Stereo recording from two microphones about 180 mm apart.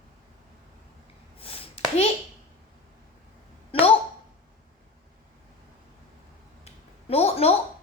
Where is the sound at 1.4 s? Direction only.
30° left (ahead or behind).